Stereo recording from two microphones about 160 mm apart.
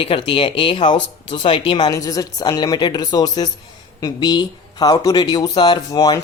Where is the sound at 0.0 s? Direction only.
35° left (ahead or behind).